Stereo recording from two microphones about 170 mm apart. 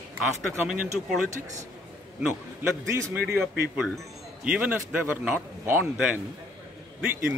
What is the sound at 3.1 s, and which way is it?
Speech, 10° right (ahead or behind).